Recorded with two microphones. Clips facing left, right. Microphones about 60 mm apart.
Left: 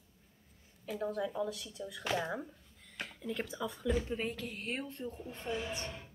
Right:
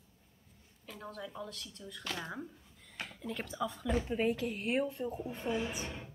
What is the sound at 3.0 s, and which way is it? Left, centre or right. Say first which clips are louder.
A woman's voice: left 2 dB; centre.